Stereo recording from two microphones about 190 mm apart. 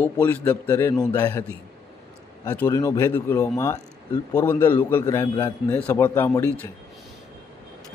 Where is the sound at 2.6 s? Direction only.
20° left (ahead or behind).